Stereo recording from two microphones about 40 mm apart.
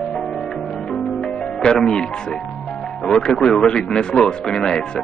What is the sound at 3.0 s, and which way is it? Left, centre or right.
Speech, centre.